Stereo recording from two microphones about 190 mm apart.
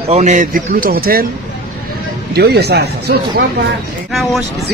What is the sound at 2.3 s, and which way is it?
Speech, 60° right (ahead or behind).